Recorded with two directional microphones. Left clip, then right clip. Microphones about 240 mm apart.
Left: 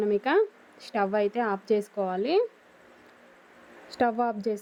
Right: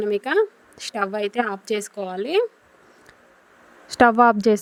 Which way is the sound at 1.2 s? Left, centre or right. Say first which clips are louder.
Right 3 dB; right.